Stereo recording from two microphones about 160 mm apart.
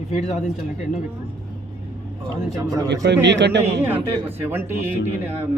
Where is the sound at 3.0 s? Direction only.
90° right.